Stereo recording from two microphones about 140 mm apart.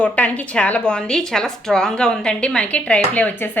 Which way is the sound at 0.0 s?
10° left (ahead or behind).